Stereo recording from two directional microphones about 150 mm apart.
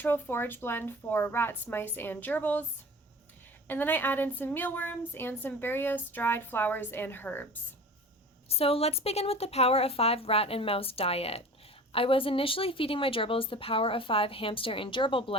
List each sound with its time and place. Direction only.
0.0 s a woman's voice: 15° left (ahead or behind)
3.7 s a woman's voice: 15° left (ahead or behind)
8.4 s a woman's voice: 40° left (ahead or behind)